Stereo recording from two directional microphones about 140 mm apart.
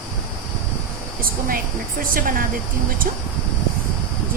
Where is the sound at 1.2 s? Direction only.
90° right.